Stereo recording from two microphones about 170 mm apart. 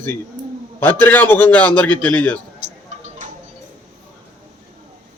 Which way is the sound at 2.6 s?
40° right (ahead or behind).